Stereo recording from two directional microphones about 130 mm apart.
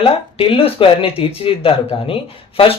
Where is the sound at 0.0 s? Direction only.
45° left (ahead or behind).